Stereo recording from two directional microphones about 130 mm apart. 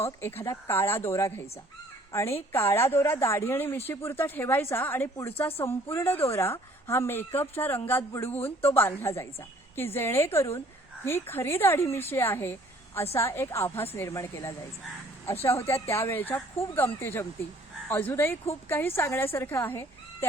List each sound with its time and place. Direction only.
0.0 s a woman's voice: 20° left (ahead or behind)